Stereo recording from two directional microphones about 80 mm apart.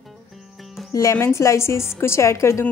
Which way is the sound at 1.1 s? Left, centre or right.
Left.